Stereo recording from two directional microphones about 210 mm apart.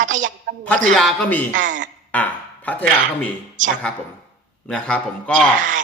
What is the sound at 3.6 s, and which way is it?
Speech, 35° right (ahead or behind).